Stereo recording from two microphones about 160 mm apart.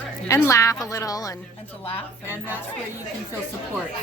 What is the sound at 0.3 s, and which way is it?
A woman's voice, 20° left (ahead or behind).